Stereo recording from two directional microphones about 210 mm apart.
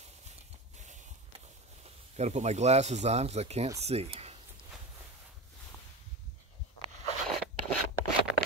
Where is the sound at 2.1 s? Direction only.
35° right (ahead or behind).